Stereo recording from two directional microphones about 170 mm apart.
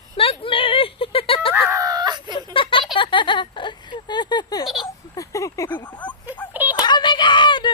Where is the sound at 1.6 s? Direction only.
20° right (ahead or behind).